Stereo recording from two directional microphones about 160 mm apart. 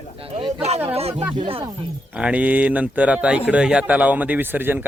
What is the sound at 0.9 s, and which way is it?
Speech, 40° right (ahead or behind).